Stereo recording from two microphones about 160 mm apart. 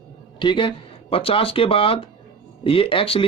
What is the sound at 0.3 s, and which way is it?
A woman's voice, 30° left (ahead or behind).